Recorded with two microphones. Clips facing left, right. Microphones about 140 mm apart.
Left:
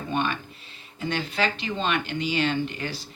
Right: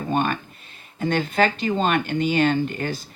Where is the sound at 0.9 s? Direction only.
50° right (ahead or behind).